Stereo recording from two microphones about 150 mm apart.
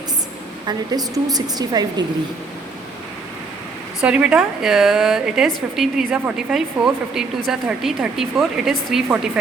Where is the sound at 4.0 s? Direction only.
5° right (ahead or behind).